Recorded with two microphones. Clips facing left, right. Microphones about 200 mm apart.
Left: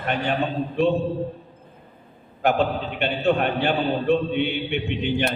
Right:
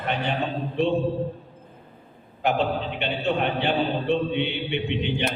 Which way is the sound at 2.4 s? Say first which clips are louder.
Left 2 dB; 50° left (ahead or behind).